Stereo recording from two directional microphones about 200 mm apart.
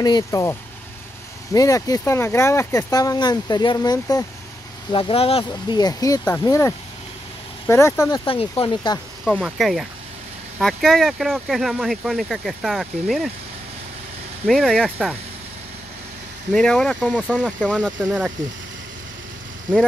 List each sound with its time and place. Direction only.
0.0 s speech: 20° left (ahead or behind)
9.2 s speech: centre (ahead or behind)
14.4 s speech: centre (ahead or behind)
16.5 s speech: 5° left (ahead or behind)